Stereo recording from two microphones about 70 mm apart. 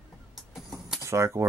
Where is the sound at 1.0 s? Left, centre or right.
Right.